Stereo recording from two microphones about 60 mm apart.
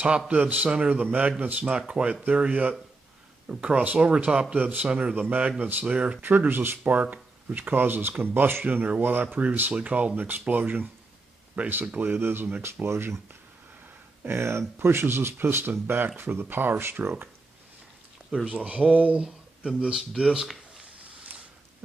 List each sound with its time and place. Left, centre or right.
0.3 s a man's voice: right
1.8 s a man's voice: centre
6.2 s speech: right
12.0 s speech: right
12.8 s speech: right
14.2 s speech: right
18.4 s a man's voice: centre
19.1 s a sound: centre
19.8 s speech: centre